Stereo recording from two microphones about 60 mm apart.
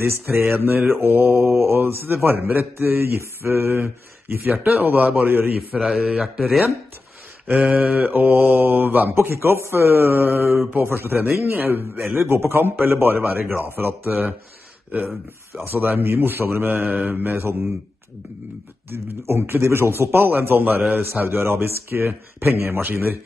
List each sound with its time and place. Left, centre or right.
0.0 s speech: right
5.8 s speech: centre
7.4 s mantra: centre; by 9.1 s right
9.1 s speech: right
11.9 s mantra: right
12.2 s speech: right
15.6 s speech: right
16.9 s mantra: right
17.2 s speech: right
18.9 s speech: right